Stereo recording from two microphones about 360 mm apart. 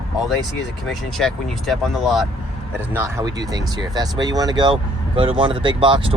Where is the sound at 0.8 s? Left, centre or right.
Centre.